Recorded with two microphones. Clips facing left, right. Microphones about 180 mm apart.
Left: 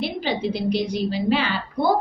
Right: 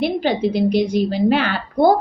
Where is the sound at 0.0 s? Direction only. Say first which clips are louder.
Right 6 dB; 50° right (ahead or behind).